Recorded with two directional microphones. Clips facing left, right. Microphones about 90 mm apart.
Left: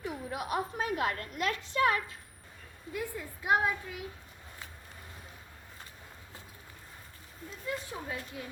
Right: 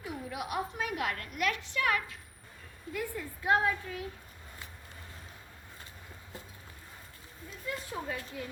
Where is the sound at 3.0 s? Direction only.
15° left (ahead or behind).